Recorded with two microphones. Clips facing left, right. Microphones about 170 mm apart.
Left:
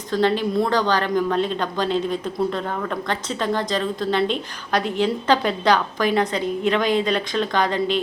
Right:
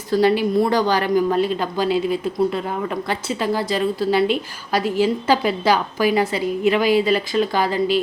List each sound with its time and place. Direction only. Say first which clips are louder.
0.1 s speech: right 3 dB; 10° right (ahead or behind)